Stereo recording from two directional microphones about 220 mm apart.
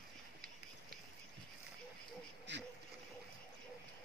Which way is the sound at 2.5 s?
55° right (ahead or behind).